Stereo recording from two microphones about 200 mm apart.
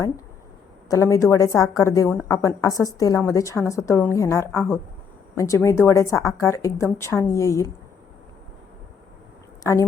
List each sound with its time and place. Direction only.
0.9 s a woman's voice: 15° left (ahead or behind)
9.7 s a woman's voice: 15° left (ahead or behind)